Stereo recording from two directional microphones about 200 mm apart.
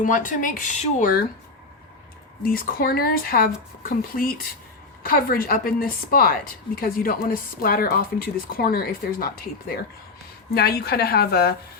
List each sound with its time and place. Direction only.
0.0 s speech: 40° left (ahead or behind)
2.4 s a woman's voice: 45° left (ahead or behind)